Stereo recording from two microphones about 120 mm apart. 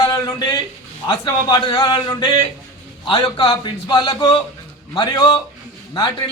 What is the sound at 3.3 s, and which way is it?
A man's voice, 40° left (ahead or behind).